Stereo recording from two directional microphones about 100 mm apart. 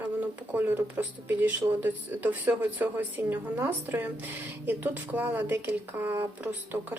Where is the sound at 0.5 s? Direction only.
20° right (ahead or behind).